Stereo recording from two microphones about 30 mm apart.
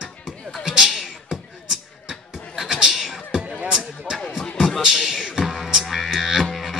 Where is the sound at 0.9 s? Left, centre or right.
Centre.